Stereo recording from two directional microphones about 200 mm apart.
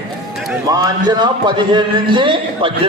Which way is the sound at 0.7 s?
20° right (ahead or behind).